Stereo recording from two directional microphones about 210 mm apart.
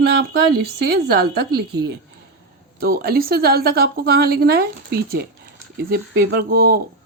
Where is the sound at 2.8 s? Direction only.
45° right (ahead or behind).